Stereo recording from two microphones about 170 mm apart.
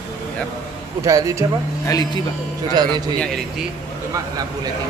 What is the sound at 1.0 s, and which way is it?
Speech, 20° right (ahead or behind).